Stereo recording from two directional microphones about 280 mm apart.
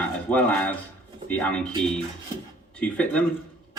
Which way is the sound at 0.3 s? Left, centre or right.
Centre.